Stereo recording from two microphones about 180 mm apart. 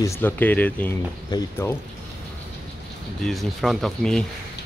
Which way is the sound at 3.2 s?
Centre (ahead or behind).